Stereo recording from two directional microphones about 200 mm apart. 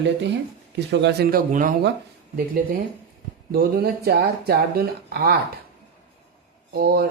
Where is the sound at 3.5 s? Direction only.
50° right (ahead or behind).